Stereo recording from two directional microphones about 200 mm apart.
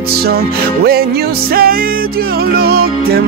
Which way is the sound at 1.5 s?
50° right (ahead or behind).